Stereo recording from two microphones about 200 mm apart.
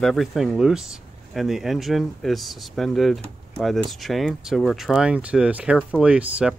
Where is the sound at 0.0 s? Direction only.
Centre (ahead or behind).